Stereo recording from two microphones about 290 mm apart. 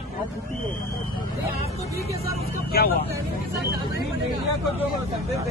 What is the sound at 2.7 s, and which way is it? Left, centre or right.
Speech, left.